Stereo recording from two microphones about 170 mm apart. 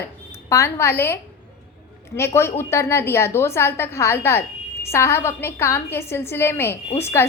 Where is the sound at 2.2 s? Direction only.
15° left (ahead or behind).